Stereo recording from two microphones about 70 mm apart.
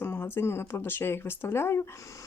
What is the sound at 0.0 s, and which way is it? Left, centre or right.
Speech, left.